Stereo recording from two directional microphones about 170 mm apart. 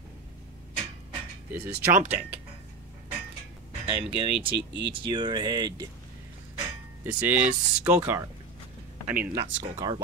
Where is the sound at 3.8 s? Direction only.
35° right (ahead or behind).